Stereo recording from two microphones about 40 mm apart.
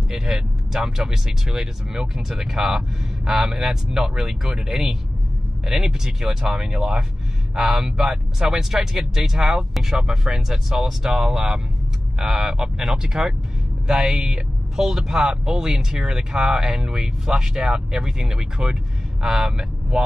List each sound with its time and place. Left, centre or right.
0.1 s speech: centre